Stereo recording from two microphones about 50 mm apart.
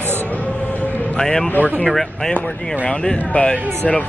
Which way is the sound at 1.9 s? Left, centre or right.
Centre.